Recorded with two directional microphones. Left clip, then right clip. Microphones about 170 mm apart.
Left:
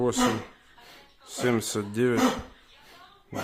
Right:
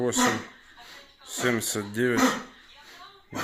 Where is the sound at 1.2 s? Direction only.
30° left (ahead or behind).